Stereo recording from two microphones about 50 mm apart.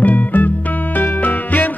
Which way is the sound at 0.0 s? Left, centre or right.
Left.